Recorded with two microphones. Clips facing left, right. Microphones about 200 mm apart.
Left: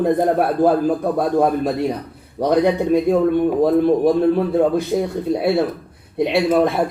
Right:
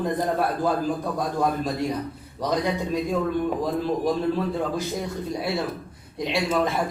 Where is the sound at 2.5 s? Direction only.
60° left (ahead or behind).